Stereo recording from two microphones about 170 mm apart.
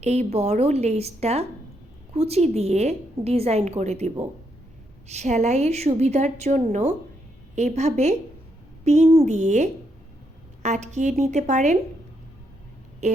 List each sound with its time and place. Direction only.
0.0 s a woman's voice: 40° right (ahead or behind)
13.0 s a woman's voice: 45° right (ahead or behind)